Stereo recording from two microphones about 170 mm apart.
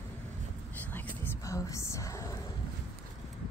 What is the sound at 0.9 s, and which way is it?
Whispering, 15° left (ahead or behind).